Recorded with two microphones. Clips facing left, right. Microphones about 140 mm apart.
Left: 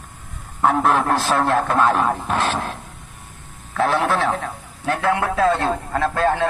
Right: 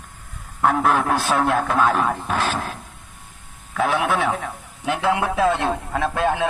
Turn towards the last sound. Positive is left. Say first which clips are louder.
# left 2 dB
turn(degrees=-10)  # may be behind; listen again after turning